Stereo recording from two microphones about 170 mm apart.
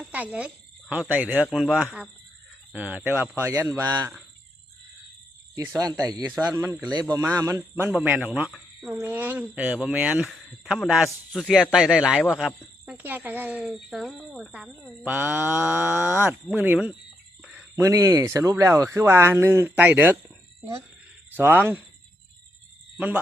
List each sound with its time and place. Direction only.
0.0 s speech: 10° right (ahead or behind)
5.5 s speech: 20° right (ahead or behind)
17.4 s a sound: 5° right (ahead or behind)
17.7 s speech: 20° right (ahead or behind)
21.3 s speech: 10° right (ahead or behind)